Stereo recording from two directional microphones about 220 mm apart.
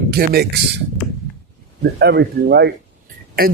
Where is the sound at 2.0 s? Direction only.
50° right (ahead or behind).